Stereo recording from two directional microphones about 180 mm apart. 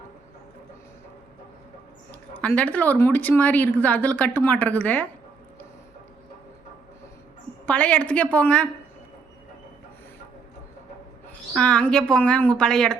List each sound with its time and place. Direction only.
2.4 s a woman's voice: 10° left (ahead or behind)
7.7 s a woman's voice: 5° left (ahead or behind)
11.5 s speech: 5° left (ahead or behind)